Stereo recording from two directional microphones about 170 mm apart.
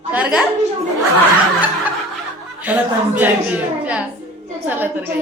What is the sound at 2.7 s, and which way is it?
Speech, 10° right (ahead or behind).